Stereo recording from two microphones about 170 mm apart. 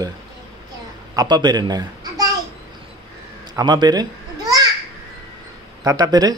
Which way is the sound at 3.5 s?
25° right (ahead or behind).